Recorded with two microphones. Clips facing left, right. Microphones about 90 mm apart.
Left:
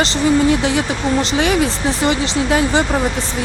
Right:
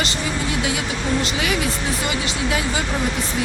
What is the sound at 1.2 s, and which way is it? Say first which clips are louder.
Speech: left 6 dB; 35° left (ahead or behind).